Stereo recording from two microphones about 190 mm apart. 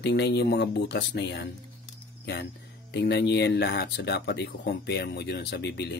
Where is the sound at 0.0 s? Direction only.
65° left (ahead or behind).